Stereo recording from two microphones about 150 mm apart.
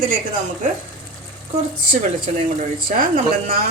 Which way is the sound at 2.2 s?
60° right (ahead or behind).